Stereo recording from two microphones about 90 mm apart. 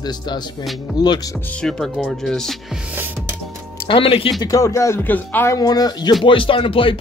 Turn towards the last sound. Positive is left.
turn(degrees=75)  # may be behind; listen again after turning